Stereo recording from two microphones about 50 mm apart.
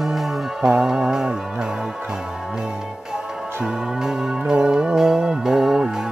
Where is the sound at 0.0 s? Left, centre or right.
Centre.